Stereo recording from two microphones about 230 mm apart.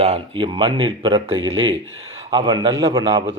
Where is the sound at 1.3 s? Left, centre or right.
Right.